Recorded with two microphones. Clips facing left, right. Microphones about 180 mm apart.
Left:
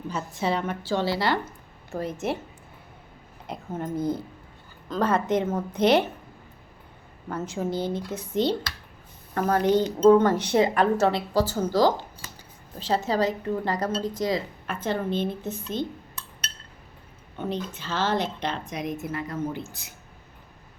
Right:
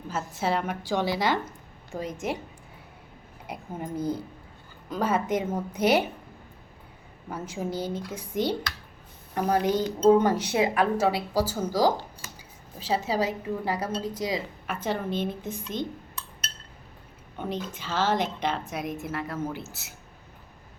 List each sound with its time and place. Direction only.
0.1 s speech: 5° right (ahead or behind)
3.4 s speech: 10° right (ahead or behind)
7.3 s speech: 10° right (ahead or behind)
12.8 s speech: 10° right (ahead or behind)
17.5 s speech: 10° right (ahead or behind)